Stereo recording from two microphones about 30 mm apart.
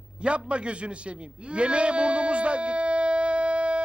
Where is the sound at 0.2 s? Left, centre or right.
Right.